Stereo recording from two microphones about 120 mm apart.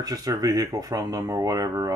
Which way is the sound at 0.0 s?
30° right (ahead or behind).